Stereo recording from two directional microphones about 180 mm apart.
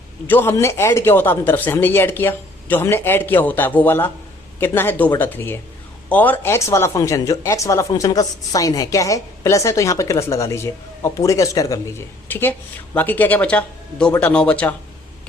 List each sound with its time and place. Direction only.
0.3 s speech: 10° left (ahead or behind)